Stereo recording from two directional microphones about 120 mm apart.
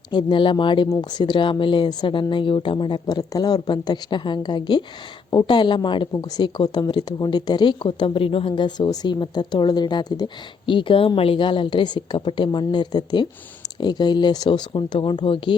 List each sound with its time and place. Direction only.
0.1 s a woman's voice: 40° left (ahead or behind)
10.7 s a woman's voice: 45° left (ahead or behind)